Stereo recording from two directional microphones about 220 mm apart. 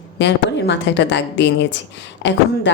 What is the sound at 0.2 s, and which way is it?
A woman's voice, 55° left (ahead or behind).